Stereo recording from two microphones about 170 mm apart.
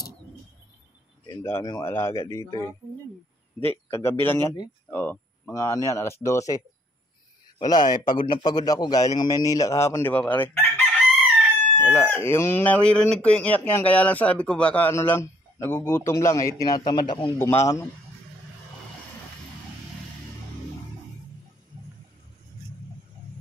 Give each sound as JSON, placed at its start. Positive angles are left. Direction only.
{"t": 1.2, "sound": "speech", "side_deg": 15}
{"t": 17.4, "sound": "speech", "side_deg": 15}